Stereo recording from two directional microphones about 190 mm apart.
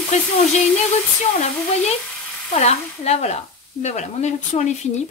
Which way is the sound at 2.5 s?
35° left (ahead or behind).